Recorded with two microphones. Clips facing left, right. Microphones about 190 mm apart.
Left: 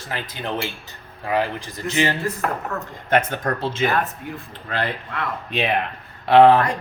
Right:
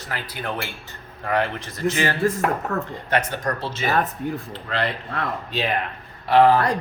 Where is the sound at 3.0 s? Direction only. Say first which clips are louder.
Left 5 dB; 50° left (ahead or behind).